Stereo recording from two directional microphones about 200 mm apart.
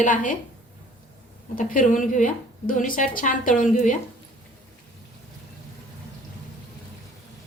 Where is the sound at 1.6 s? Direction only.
40° left (ahead or behind).